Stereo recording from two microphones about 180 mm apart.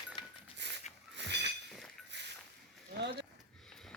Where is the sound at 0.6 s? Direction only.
75° right (ahead or behind).